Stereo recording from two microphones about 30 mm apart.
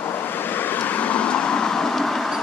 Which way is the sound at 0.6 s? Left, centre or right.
Left.